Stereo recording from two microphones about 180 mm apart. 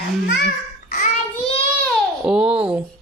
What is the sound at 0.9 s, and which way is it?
Child singing, 50° left (ahead or behind).